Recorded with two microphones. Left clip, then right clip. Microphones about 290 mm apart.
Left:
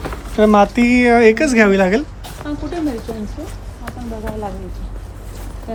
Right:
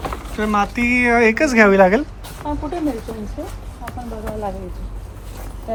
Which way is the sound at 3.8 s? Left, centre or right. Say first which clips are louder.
Left 1 dB; centre.